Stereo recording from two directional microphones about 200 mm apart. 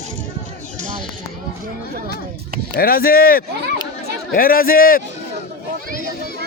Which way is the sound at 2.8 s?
45° left (ahead or behind).